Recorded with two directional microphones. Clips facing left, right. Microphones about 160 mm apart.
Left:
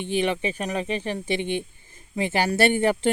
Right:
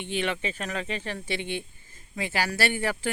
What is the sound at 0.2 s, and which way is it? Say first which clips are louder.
Speech: left 5 dB; 15° left (ahead or behind).